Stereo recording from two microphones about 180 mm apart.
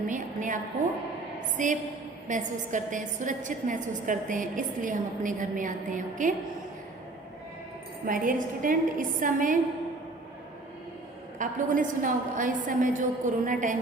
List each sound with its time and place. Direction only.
0.1 s a woman's voice: 45° right (ahead or behind)
8.0 s a woman's voice: 50° right (ahead or behind)
11.3 s a woman's voice: 45° right (ahead or behind)